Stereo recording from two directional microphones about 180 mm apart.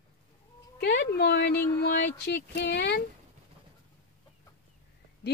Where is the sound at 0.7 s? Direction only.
65° left (ahead or behind).